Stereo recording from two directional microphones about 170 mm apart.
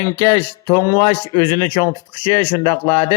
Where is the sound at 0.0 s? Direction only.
20° left (ahead or behind).